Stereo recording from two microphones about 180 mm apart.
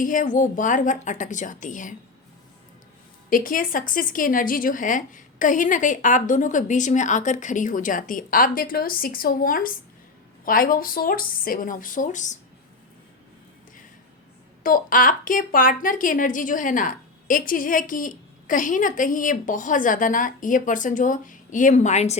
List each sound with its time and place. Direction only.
0.0 s a woman's voice: 45° left (ahead or behind)
3.2 s a woman's voice: 50° left (ahead or behind)
14.6 s a woman's voice: 50° left (ahead or behind)